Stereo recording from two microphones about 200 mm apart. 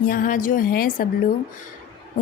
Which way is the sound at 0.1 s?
45° left (ahead or behind).